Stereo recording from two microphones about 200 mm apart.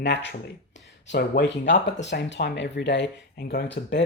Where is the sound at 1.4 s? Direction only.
65° left (ahead or behind).